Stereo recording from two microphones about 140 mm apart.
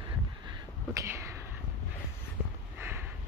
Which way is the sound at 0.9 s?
20° right (ahead or behind).